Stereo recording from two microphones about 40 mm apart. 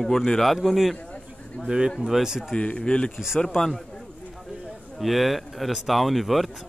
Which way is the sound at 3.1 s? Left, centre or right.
Centre.